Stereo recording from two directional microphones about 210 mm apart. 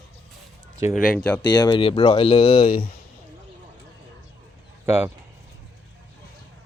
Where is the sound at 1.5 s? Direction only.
20° left (ahead or behind).